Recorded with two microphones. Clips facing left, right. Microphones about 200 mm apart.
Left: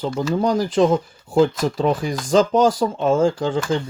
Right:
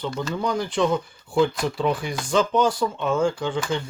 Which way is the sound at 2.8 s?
40° left (ahead or behind).